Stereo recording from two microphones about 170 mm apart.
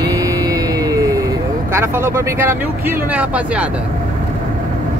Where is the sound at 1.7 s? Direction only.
15° right (ahead or behind).